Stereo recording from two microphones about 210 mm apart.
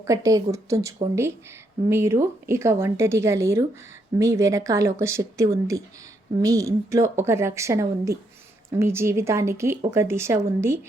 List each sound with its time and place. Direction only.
0.0 s speech: 15° right (ahead or behind)